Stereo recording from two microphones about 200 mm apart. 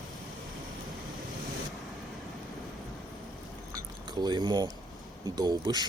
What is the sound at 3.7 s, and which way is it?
Liquid, 20° right (ahead or behind).